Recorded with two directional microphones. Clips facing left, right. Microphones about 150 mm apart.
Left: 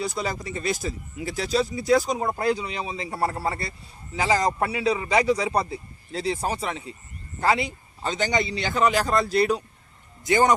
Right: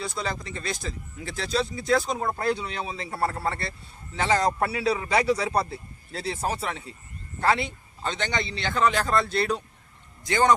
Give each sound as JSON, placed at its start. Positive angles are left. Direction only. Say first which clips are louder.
{"t": 0.0, "sound": "speech", "louder": "left 3 dB", "side_deg": 0}
{"t": 0.3, "sound": "speech", "louder": "left 5 dB", "side_deg": 20}
{"t": 0.9, "sound": "speech", "louder": "left 4 dB", "side_deg": 5}
{"t": 9.1, "sound": "speech", "louder": "left 3 dB", "side_deg": 0}
{"t": 10.2, "sound": "speech", "louder": "left 3 dB", "side_deg": 20}